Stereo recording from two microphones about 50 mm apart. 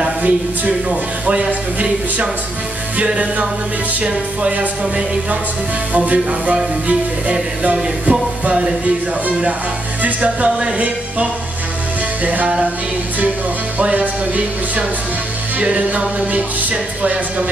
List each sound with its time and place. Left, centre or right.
0.2 s speech: right
4.0 s speech: right
8.0 s speech: right
10.0 s speech: right
13.7 s speech: right